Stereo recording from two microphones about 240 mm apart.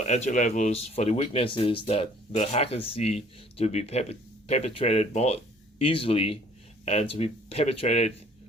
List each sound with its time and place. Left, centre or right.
0.0 s speech: left